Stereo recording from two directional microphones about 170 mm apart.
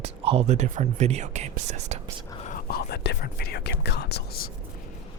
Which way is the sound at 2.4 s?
50° left (ahead or behind).